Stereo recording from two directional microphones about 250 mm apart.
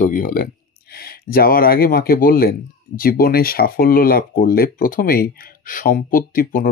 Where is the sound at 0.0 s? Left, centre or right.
Left.